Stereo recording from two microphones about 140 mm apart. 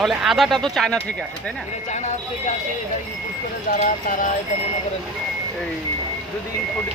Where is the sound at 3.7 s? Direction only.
75° left (ahead or behind).